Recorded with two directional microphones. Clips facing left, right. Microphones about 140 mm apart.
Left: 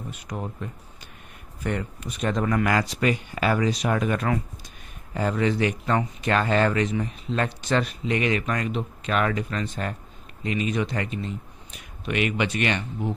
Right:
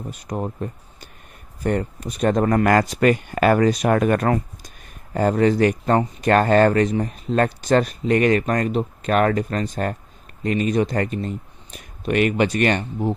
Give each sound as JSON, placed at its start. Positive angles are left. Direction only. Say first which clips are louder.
{"t": 0.1, "sound": "speech", "louder": "right 8 dB", "side_deg": -40}